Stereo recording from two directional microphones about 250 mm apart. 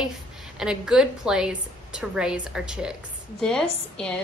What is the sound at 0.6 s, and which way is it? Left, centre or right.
A woman's voice, centre.